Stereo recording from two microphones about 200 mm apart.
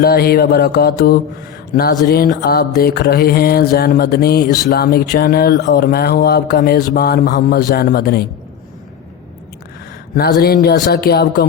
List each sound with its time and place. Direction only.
0.0 s speech: 50° left (ahead or behind)
10.2 s speech: 50° left (ahead or behind)